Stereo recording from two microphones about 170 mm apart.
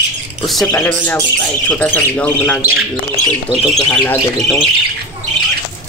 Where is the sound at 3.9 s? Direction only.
10° left (ahead or behind).